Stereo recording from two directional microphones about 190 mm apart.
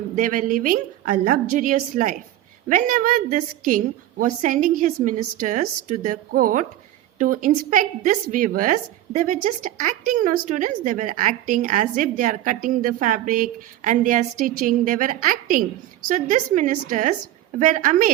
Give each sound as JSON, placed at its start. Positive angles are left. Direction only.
{"t": 0.2, "sound": "a woman's voice", "side_deg": -45}